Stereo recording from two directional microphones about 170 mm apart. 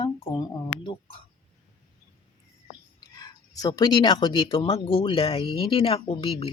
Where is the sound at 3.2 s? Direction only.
20° left (ahead or behind).